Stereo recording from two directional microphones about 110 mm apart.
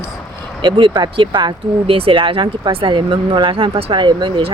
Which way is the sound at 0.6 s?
45° right (ahead or behind).